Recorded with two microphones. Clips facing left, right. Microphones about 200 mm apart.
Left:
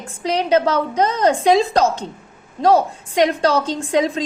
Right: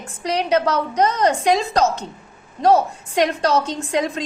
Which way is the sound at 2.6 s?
30° left (ahead or behind).